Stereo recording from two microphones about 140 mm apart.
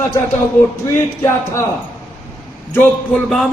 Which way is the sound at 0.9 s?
20° left (ahead or behind).